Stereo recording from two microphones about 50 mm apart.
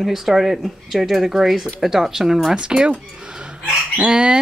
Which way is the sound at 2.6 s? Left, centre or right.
Centre.